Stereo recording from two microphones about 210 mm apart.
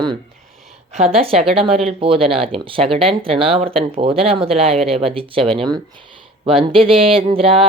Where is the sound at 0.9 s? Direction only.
30° right (ahead or behind).